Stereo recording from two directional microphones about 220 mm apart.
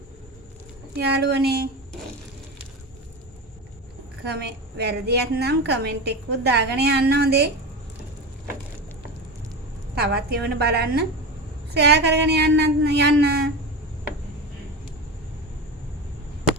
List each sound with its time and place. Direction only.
0.9 s a woman's voice: 45° right (ahead or behind)
4.8 s a woman's voice: 45° right (ahead or behind)
10.0 s a woman's voice: 45° right (ahead or behind)